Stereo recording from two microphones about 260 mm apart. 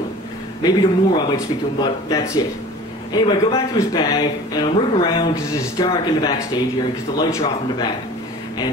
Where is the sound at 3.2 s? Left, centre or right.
Centre.